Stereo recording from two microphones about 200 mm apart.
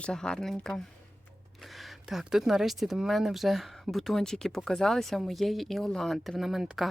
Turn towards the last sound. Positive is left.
turn(degrees=0)  # may be behind; listen again after turning